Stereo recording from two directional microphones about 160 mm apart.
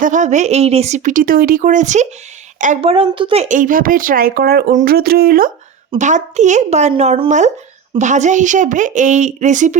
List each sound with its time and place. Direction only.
0.0 s speech: 50° right (ahead or behind)
2.9 s speech: 35° right (ahead or behind); by 5.5 s 70° right (ahead or behind)
6.0 s speech: 50° right (ahead or behind)